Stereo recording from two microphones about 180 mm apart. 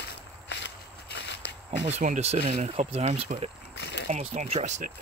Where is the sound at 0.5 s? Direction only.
70° left (ahead or behind).